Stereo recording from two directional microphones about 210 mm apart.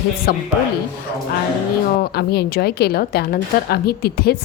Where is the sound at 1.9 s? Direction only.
50° left (ahead or behind).